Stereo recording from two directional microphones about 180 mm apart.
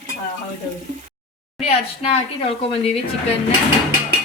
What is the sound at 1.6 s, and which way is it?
A woman's voice, 35° left (ahead or behind).